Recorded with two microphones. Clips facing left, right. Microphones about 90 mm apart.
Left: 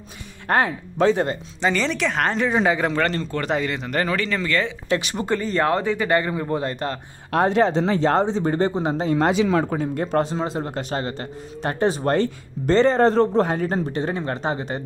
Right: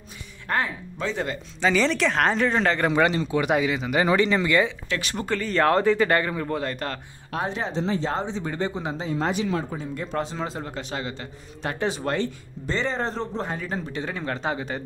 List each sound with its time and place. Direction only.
0.5 s speech: 55° left (ahead or behind)
1.7 s speech: centre (ahead or behind)
2.9 s a man's voice: 10° right (ahead or behind)
4.0 s a man's voice: 20° right (ahead or behind)
5.0 s speech: 15° left (ahead or behind)
6.0 s speech: 15° left (ahead or behind)
6.5 s speech: 25° left (ahead or behind)
7.2 s speech: 65° left (ahead or behind)
8.3 s speech: 45° left (ahead or behind)
10.3 s speech: 20° left (ahead or behind)
10.6 s speech: 50° left (ahead or behind)
12.6 s speech: 60° left (ahead or behind)
13.7 s speech: 45° left (ahead or behind)
14.1 s speech: 30° left (ahead or behind)